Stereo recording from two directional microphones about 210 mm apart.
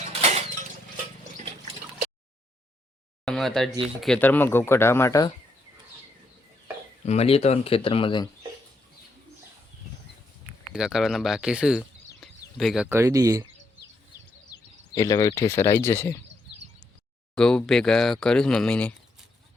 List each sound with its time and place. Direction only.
0.1 s a sound: 30° right (ahead or behind)
3.2 s speech: centre (ahead or behind)
7.0 s speech: 30° left (ahead or behind)
10.8 s speech: centre (ahead or behind)
14.5 s speech: 15° left (ahead or behind)
17.3 s speech: 5° left (ahead or behind)